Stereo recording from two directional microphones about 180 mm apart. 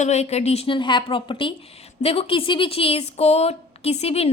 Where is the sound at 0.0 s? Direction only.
35° left (ahead or behind).